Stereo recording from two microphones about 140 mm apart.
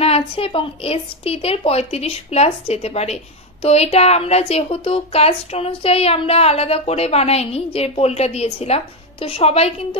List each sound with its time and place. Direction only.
0.0 s a woman's voice: 45° left (ahead or behind)